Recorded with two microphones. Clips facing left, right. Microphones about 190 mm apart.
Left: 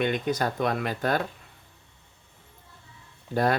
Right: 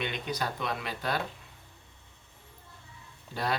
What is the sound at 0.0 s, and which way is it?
Speech, 50° left (ahead or behind).